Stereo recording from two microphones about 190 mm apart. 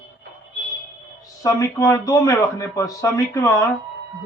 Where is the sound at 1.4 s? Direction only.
15° left (ahead or behind).